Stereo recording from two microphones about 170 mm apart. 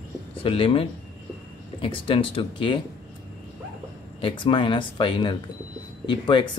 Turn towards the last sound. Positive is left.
turn(degrees=25)  # may be behind; listen again after turning